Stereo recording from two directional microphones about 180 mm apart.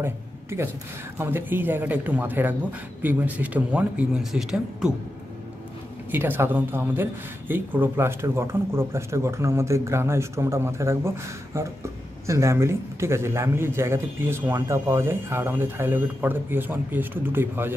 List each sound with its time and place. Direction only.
0.0 s speech: 15° right (ahead or behind)
6.1 s speech: 10° right (ahead or behind)